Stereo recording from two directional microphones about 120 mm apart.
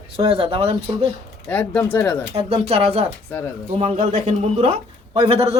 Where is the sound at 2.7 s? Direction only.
55° right (ahead or behind).